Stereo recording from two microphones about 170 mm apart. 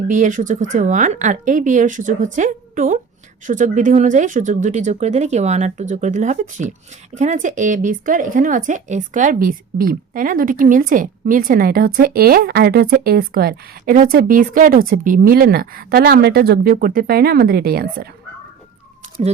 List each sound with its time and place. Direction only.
0.1 s a woman's voice: 50° right (ahead or behind); by 18.1 s 65° right (ahead or behind)